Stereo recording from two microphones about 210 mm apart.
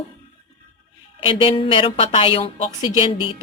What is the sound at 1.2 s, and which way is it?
A woman's voice, 25° left (ahead or behind).